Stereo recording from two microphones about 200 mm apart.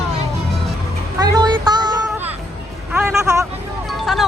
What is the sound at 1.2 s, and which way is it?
Children playing, 20° right (ahead or behind).